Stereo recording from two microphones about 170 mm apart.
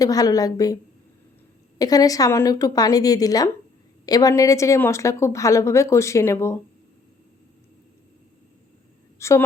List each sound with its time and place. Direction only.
0.0 s a woman's voice: 20° left (ahead or behind)
1.8 s a woman's voice: 20° left (ahead or behind)
9.1 s a sound: 15° left (ahead or behind)